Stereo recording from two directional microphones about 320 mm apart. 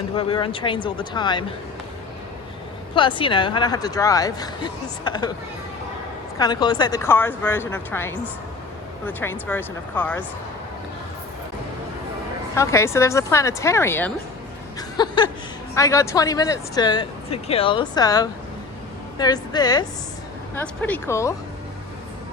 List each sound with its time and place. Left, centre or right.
0.2 s speech: centre
2.9 s speech: centre
6.4 s speech: centre
12.5 s speech: centre
14.8 s chuckle: centre
15.7 s speech: centre